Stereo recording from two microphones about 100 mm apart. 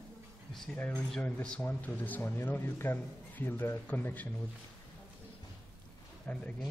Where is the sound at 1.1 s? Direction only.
10° left (ahead or behind).